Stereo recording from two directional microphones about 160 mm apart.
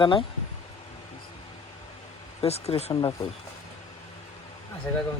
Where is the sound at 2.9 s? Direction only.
25° left (ahead or behind).